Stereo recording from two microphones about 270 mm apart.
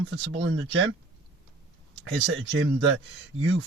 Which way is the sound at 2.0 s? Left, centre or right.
Right.